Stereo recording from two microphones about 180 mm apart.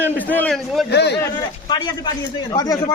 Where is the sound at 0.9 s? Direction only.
70° left (ahead or behind).